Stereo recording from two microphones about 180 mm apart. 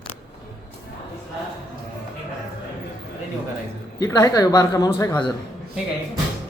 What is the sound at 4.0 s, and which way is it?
Speech, 20° left (ahead or behind).